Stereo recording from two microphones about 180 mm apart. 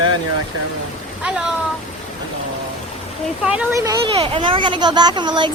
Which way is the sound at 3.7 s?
15° right (ahead or behind).